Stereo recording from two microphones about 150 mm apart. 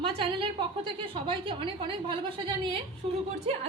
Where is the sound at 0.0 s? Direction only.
35° right (ahead or behind).